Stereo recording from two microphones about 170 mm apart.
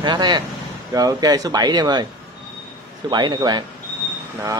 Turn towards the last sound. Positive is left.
turn(degrees=-25)  # may be behind; listen again after turning